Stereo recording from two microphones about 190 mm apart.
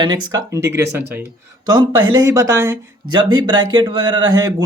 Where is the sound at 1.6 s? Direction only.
20° right (ahead or behind).